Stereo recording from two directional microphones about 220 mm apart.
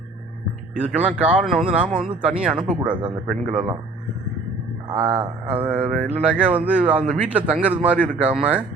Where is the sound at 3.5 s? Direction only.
25° right (ahead or behind).